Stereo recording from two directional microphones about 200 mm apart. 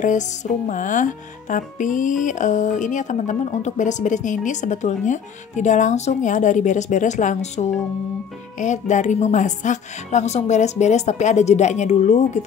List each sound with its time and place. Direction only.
0.7 s a woman's voice: 40° left (ahead or behind)